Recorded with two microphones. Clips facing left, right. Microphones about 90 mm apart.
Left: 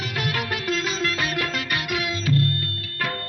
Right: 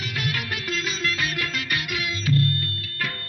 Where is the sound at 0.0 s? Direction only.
30° left (ahead or behind).